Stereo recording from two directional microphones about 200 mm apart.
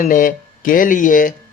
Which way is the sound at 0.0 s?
40° left (ahead or behind).